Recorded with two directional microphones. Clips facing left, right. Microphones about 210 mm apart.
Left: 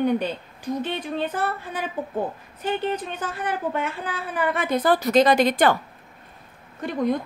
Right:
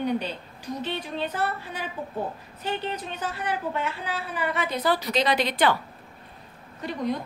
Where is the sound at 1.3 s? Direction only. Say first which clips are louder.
Right 1 dB; 50° left (ahead or behind).